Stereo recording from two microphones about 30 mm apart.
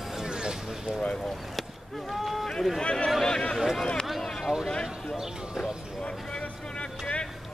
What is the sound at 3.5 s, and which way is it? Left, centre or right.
Speech, centre.